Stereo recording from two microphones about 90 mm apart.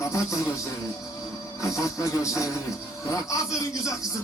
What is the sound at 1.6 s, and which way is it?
Music, 35° left (ahead or behind).